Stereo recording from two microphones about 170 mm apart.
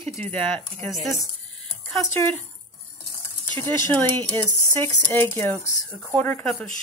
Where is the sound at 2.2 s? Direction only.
15° left (ahead or behind).